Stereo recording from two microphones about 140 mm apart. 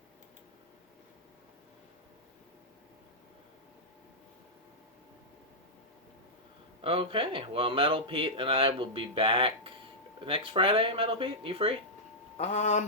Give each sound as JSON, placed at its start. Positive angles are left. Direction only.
{"t": 6.8, "sound": "speech", "side_deg": -40}
{"t": 12.4, "sound": "speech", "side_deg": 55}